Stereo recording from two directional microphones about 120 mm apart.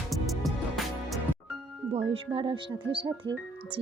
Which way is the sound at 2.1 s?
45° right (ahead or behind).